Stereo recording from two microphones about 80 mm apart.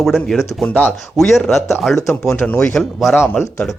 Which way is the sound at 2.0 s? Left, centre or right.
Left.